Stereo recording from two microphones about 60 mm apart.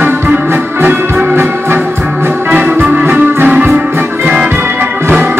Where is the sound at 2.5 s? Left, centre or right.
Right.